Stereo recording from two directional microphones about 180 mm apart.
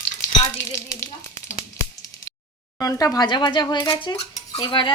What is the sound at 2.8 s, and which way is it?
Speech, 20° left (ahead or behind).